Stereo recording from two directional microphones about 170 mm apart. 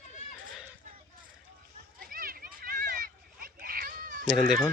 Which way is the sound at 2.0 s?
60° right (ahead or behind).